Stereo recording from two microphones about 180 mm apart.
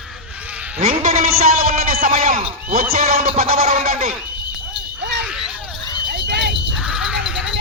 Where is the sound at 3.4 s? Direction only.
40° right (ahead or behind).